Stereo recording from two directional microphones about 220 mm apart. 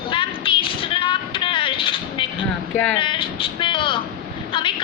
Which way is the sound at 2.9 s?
20° left (ahead or behind).